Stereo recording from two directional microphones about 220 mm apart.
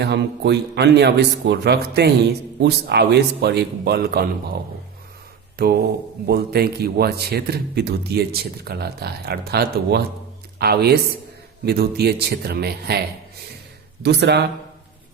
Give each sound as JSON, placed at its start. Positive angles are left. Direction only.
{"t": 0.0, "sound": "speech", "side_deg": -50}